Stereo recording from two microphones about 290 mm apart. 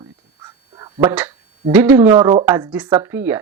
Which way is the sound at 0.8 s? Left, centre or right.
Centre.